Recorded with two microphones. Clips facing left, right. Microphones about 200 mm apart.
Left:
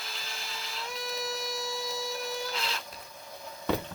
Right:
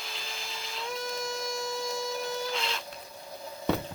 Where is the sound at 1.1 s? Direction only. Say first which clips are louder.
Right 1 dB; 5° left (ahead or behind).